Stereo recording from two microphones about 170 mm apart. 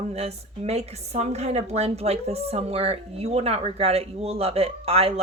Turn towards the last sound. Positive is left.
turn(degrees=-35)  # may be behind; listen again after turning